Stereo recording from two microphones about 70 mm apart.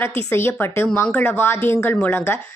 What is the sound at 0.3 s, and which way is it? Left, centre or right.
Speech, left.